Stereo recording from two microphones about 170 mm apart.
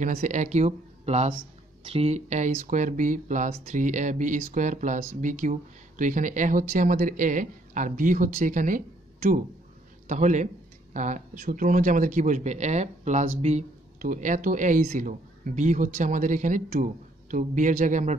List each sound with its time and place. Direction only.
0.0 s speech: 45° right (ahead or behind)